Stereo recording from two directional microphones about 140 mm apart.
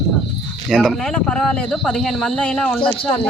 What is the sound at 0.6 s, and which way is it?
Speech, centre (ahead or behind).